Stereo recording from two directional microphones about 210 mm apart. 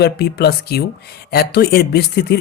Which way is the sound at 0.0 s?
50° left (ahead or behind).